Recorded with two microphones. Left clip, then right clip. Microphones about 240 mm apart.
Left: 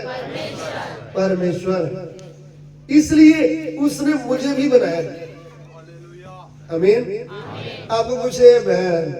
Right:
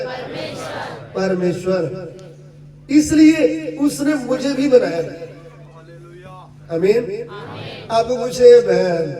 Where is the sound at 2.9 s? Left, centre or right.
Right.